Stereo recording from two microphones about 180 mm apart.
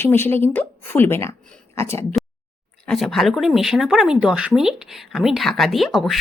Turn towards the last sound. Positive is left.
turn(degrees=0)  # may be behind; listen again after turning